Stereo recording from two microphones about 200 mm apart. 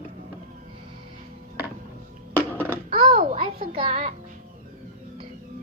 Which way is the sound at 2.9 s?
35° right (ahead or behind).